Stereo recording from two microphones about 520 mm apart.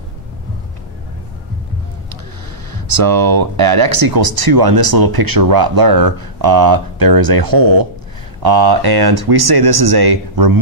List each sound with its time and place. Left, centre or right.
2.7 s speech: right